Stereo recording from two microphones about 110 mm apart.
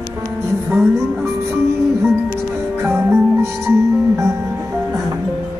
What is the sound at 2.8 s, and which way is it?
Music, 20° right (ahead or behind).